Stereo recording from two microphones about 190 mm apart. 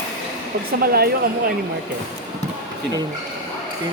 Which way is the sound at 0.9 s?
55° right (ahead or behind).